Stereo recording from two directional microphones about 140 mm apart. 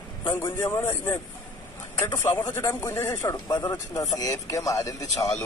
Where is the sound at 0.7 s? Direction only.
20° left (ahead or behind).